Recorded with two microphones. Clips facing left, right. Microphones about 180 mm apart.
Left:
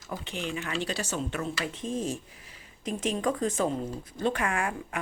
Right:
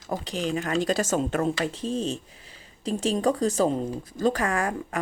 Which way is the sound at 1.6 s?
35° right (ahead or behind).